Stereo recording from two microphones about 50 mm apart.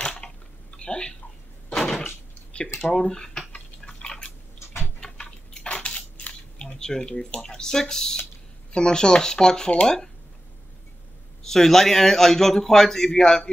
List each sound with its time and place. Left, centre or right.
0.2 s typing: centre
1.8 s a sound: centre
2.0 s door: left
2.9 s a man's voice: centre
3.5 s drip: centre
7.3 s a man's voice: centre
11.4 s a man's voice: centre